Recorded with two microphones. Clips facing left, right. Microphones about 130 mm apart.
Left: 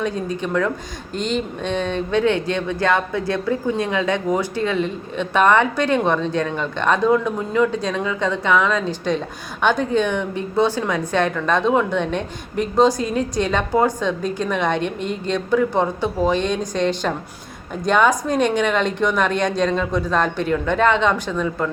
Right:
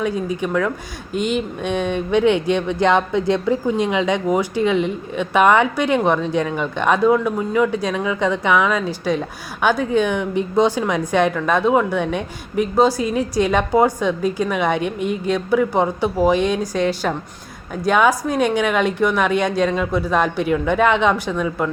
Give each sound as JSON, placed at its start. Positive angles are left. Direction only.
{"t": 0.0, "sound": "speech", "side_deg": -10}